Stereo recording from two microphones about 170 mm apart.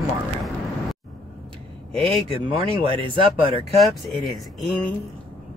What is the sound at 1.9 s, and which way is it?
Speech, 35° right (ahead or behind).